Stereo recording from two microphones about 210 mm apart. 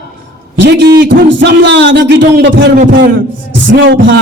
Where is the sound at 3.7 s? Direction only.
60° right (ahead or behind).